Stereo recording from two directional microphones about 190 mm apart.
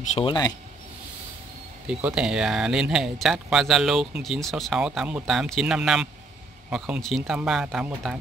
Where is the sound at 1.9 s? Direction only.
5° right (ahead or behind).